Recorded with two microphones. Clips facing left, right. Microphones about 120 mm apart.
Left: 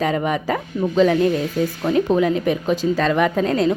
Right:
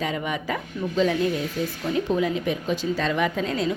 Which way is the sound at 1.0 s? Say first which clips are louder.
Left 6 dB; 65° left (ahead or behind).